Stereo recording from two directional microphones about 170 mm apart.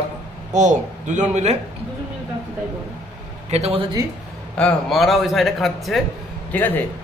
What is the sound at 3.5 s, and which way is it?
Speech, 35° right (ahead or behind).